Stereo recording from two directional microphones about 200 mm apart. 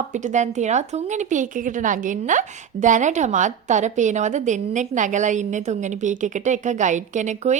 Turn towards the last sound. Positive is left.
turn(degrees=-35)  # may be behind; listen again after turning